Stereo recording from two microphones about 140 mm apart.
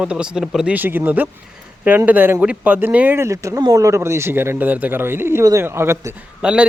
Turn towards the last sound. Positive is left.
turn(degrees=-5)  # may be behind; listen again after turning